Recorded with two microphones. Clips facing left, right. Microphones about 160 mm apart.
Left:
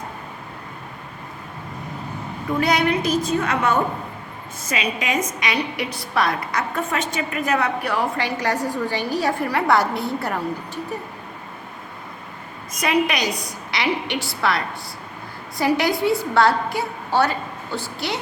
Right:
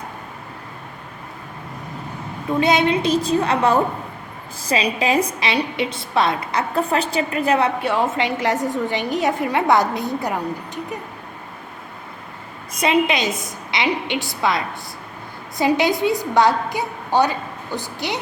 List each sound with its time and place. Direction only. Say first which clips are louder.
2.5 s a woman's voice: right 2 dB; 20° right (ahead or behind)
12.8 s a woman's voice: right 2 dB; 25° right (ahead or behind)